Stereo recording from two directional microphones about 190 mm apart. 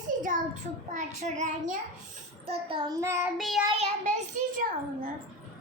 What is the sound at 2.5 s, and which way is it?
Child singing, 30° right (ahead or behind).